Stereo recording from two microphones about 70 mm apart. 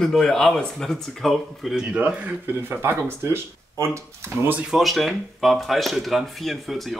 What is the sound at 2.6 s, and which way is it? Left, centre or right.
Speech, right.